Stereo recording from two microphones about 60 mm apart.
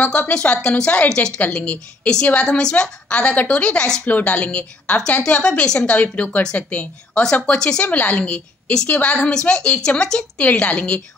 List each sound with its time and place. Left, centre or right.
0.0 s speech: centre
1.4 s a woman's voice: left
2.4 s a woman's voice: centre